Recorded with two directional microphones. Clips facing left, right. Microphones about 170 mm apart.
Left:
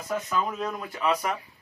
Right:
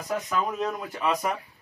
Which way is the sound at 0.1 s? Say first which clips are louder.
Even; 15° right (ahead or behind).